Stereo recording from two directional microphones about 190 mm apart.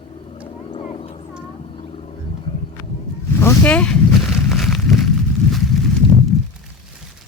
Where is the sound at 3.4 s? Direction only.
10° left (ahead or behind).